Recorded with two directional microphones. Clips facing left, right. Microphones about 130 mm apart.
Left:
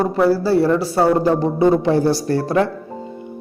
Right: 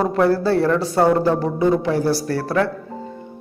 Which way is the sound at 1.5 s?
30° left (ahead or behind).